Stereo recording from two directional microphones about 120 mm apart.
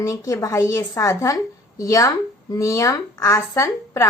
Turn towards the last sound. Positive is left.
turn(degrees=25)  # may be behind; listen again after turning